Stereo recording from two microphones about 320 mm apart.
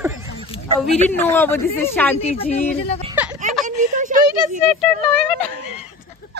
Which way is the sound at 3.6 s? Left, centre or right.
Right.